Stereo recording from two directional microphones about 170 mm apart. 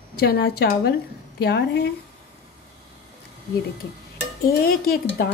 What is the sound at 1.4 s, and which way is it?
Speech, 90° left.